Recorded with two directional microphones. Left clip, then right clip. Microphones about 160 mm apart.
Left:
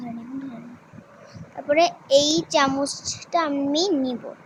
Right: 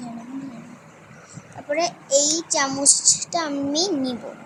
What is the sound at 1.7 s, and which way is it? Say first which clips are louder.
A child's voice: left 4 dB; 25° left (ahead or behind).